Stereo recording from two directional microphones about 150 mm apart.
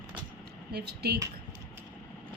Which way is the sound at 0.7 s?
90° right.